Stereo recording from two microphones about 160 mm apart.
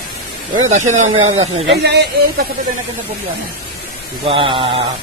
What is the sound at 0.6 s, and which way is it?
Speech, 50° right (ahead or behind).